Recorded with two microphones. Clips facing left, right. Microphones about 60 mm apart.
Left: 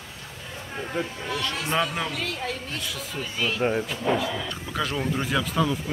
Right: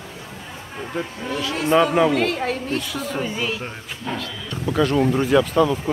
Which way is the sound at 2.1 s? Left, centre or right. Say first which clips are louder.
Right 9 dB; right.